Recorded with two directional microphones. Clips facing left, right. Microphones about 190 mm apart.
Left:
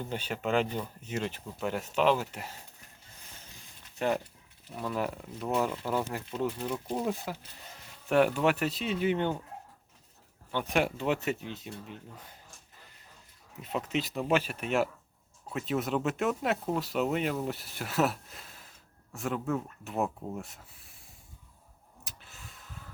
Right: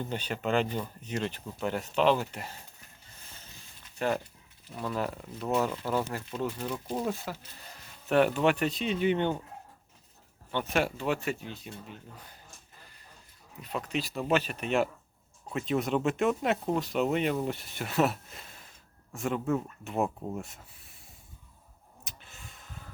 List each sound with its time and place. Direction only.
0.0 s speech: 10° left (ahead or behind)
3.4 s a sound: 15° left (ahead or behind)
4.8 s speech: 10° left (ahead or behind)
10.7 s speech: 15° left (ahead or behind)
13.6 s speech: 25° left (ahead or behind); by 21.0 s centre (ahead or behind)
22.0 s a sound: centre (ahead or behind)